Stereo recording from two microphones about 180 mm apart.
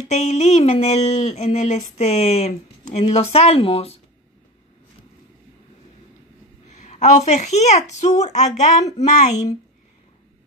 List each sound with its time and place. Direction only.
0.1 s a woman's voice: 40° left (ahead or behind)
6.7 s a woman's voice: 40° left (ahead or behind)
9.3 s a woman's voice: 20° left (ahead or behind)